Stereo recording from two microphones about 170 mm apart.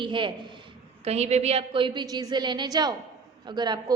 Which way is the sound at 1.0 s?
40° right (ahead or behind).